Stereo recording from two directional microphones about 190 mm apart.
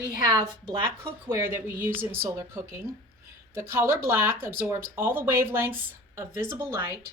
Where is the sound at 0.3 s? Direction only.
25° right (ahead or behind).